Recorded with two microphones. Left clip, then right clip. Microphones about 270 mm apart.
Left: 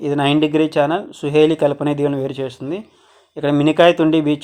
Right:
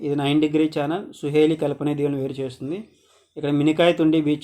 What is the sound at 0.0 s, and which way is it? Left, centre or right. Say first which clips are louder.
Speech: left 5 dB; centre.